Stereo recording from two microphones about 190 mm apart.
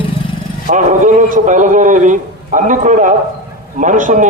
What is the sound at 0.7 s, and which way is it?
A man's voice, 40° right (ahead or behind).